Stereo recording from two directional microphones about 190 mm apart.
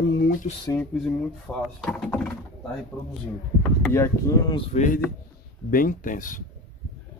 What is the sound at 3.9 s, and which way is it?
Speech, 15° left (ahead or behind).